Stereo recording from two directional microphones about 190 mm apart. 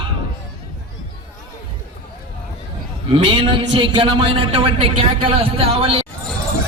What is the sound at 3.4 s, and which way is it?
Speech, 25° right (ahead or behind).